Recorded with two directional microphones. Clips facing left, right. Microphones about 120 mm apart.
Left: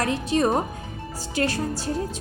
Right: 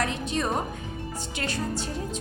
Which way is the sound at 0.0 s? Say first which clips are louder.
Left 6 dB; 40° left (ahead or behind).